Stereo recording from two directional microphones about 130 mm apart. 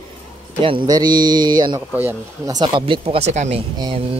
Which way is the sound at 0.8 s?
30° right (ahead or behind).